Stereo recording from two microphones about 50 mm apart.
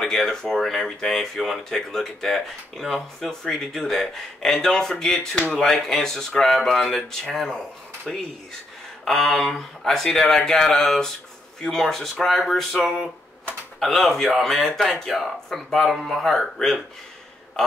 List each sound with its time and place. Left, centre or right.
0.0 s speech: centre
13.7 s a man's voice: centre